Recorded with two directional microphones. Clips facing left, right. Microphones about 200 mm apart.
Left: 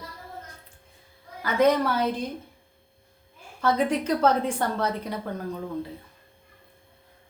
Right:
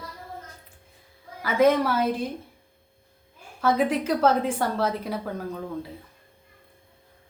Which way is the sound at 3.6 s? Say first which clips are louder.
Right 1 dB; 5° right (ahead or behind).